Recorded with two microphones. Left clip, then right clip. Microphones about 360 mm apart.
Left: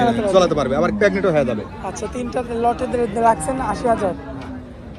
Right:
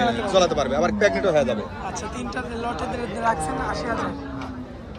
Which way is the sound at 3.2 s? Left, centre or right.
Centre.